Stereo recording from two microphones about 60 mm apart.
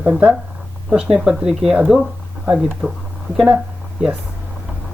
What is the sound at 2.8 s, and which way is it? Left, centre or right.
Speech, right.